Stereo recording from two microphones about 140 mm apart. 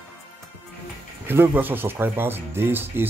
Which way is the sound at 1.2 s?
15° right (ahead or behind).